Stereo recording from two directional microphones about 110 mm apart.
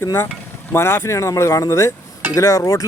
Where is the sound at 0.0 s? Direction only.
25° left (ahead or behind).